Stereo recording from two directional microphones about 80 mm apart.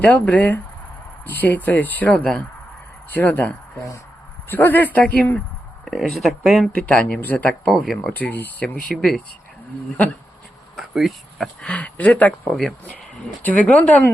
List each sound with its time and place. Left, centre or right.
0.0 s speech: centre
3.1 s speech: left
5.8 s speech: centre
6.7 s speech: centre
7.6 s speech: centre
8.1 s speech: left
8.6 s speech: centre
10.8 s speech: centre
11.6 s speech: centre